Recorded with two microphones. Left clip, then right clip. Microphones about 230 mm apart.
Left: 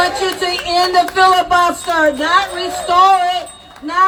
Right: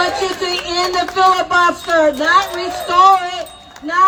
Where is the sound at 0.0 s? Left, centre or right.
Left.